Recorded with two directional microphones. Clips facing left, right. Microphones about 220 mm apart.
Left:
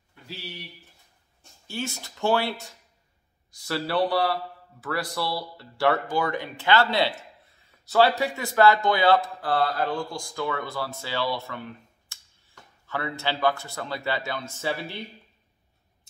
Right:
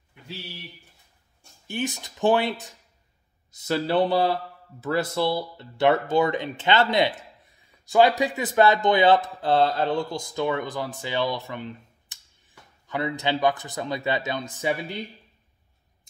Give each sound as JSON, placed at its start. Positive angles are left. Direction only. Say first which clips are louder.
{"t": 1.7, "sound": "speech", "louder": "right 4 dB", "side_deg": -15}